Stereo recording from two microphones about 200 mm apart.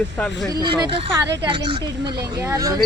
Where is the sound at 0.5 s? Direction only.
20° right (ahead or behind).